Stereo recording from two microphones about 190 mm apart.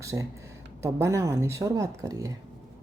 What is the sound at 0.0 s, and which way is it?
A woman's voice, 15° right (ahead or behind).